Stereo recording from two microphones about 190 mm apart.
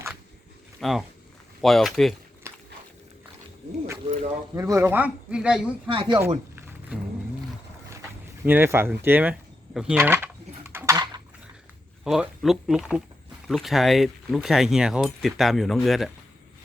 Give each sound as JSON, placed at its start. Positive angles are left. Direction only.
{"t": 0.8, "sound": "speech", "side_deg": 0}
{"t": 2.5, "sound": "biting", "side_deg": -15}
{"t": 4.5, "sound": "a man's voice", "side_deg": -15}
{"t": 5.9, "sound": "speech", "side_deg": -25}
{"t": 6.6, "sound": "a sound", "side_deg": -10}
{"t": 8.4, "sound": "a man's voice", "side_deg": -10}
{"t": 10.7, "sound": "a sound", "side_deg": -15}
{"t": 12.0, "sound": "speech", "side_deg": 0}